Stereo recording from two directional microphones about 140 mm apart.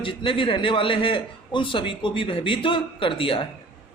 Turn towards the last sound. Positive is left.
turn(degrees=40)  # may be behind; listen again after turning